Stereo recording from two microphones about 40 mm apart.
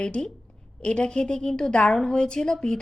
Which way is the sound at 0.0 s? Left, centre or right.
Left.